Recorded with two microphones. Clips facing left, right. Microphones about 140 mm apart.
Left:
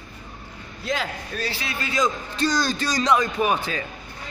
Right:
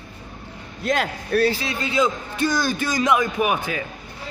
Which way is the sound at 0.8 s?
60° right (ahead or behind).